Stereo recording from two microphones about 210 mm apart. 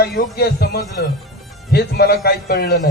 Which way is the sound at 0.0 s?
50° left (ahead or behind).